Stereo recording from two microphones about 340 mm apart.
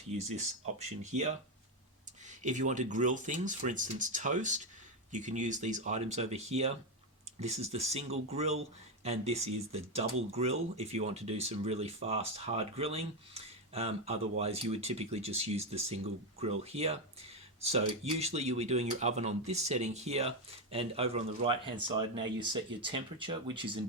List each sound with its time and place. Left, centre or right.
0.8 s speech: centre
2.4 s speech: right